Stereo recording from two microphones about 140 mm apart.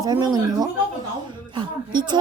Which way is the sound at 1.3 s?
35° right (ahead or behind).